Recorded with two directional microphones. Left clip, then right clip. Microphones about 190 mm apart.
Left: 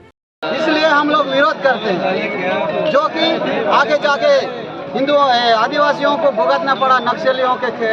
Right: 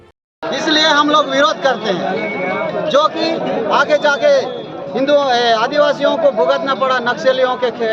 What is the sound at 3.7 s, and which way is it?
A man's voice, 25° right (ahead or behind).